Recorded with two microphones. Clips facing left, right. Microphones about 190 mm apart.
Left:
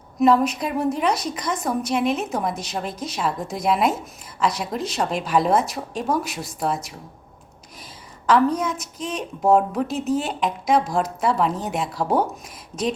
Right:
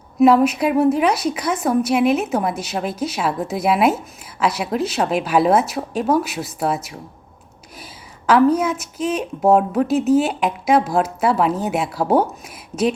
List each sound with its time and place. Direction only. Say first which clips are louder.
0.4 s a woman's voice: right 7 dB; 10° right (ahead or behind)
8.3 s a woman's voice: right 4 dB; 5° right (ahead or behind)
12.7 s speech: right 6 dB; 45° right (ahead or behind)